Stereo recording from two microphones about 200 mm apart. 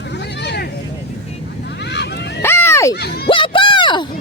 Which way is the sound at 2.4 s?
10° left (ahead or behind).